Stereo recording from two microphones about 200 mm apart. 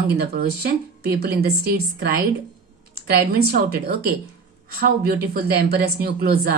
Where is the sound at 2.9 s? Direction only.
50° right (ahead or behind).